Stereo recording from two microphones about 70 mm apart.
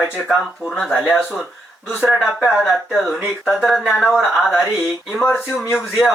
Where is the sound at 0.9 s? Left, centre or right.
Centre.